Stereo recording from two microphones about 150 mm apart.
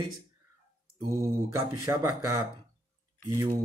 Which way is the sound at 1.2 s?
20° right (ahead or behind).